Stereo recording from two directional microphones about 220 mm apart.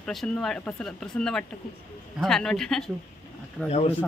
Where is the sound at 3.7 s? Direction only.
25° left (ahead or behind).